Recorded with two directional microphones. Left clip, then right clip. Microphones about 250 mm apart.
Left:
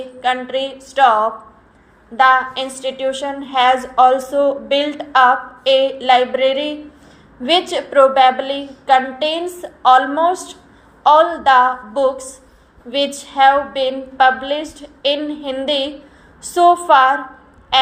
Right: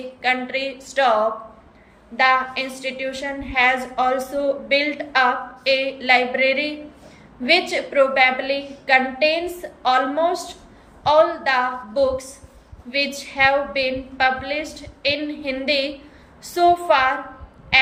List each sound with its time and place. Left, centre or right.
0.2 s a woman's voice: centre
13.3 s a woman's voice: centre